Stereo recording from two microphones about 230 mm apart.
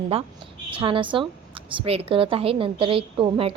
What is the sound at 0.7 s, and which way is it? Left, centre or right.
A woman's voice, right.